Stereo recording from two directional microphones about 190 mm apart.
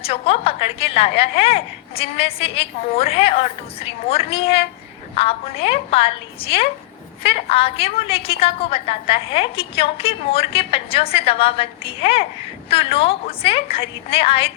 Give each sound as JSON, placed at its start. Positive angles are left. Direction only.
{"t": 0.0, "sound": "a woman's voice", "side_deg": 30}